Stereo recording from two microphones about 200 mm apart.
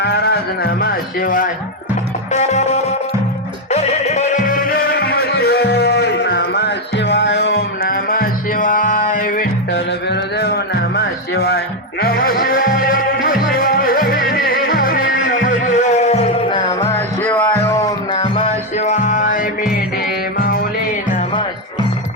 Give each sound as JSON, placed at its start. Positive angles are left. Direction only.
{"t": 0.0, "sound": "speech", "side_deg": 55}
{"t": 2.3, "sound": "music", "side_deg": 35}
{"t": 9.7, "sound": "music", "side_deg": 55}